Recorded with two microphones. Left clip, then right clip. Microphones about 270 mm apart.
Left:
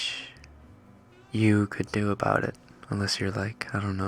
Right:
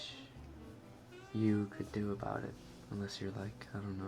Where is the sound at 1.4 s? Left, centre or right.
Left.